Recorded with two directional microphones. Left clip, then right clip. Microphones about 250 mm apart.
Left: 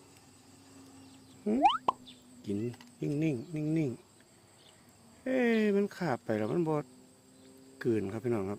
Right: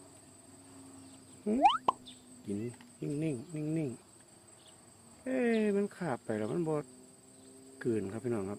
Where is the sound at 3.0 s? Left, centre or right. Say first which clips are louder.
Left 4 dB; left.